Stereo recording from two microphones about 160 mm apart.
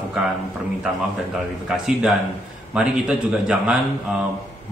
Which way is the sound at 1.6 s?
5° right (ahead or behind).